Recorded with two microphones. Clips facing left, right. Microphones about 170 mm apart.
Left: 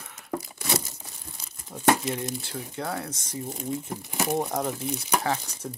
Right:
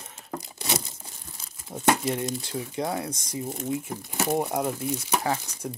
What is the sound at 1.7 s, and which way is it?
Crumpling, 25° right (ahead or behind).